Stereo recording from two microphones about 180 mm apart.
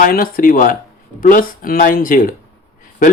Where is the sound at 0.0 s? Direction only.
50° left (ahead or behind).